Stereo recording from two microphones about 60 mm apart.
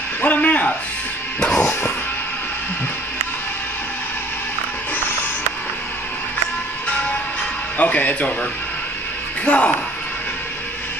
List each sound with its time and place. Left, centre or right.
0.2 s speech: left
1.4 s music: centre
6.9 s music: left
7.7 s speech: left
9.4 s speech: left